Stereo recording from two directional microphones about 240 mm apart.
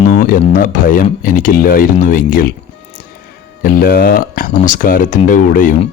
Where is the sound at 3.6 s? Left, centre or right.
Left.